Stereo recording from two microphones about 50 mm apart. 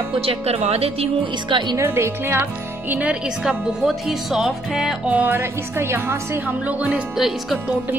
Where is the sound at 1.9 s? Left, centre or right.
Right.